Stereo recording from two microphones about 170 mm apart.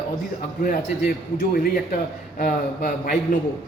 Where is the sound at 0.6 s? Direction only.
60° left (ahead or behind).